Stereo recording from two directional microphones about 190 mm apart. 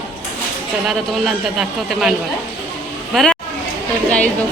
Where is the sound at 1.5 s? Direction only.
Centre (ahead or behind).